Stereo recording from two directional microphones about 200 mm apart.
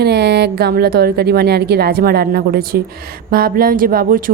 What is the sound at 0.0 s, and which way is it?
Speech, 55° right (ahead or behind).